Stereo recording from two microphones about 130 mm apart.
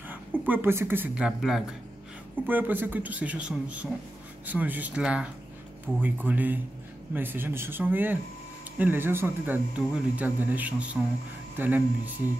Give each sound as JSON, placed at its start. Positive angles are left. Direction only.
{"t": 0.1, "sound": "a woman's voice", "side_deg": -15}